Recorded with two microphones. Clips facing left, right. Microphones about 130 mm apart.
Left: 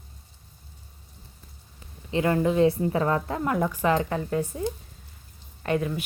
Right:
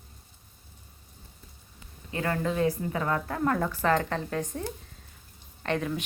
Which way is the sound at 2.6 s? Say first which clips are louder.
Left 5 dB; 30° left (ahead or behind).